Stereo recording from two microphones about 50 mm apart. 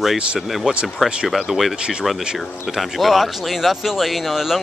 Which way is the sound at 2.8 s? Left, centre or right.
Centre.